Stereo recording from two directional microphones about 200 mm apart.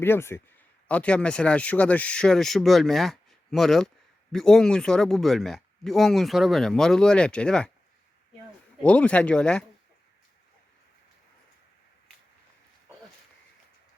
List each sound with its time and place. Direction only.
0.0 s speech: 10° left (ahead or behind)
8.8 s speech: 5° left (ahead or behind)